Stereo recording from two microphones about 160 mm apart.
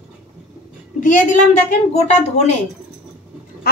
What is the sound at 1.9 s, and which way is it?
Speech, 45° left (ahead or behind).